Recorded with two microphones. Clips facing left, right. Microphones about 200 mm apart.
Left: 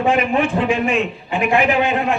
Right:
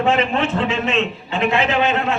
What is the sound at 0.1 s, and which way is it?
A man's voice, 15° left (ahead or behind).